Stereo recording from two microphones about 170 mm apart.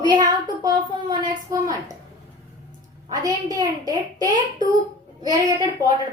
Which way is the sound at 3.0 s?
20° right (ahead or behind).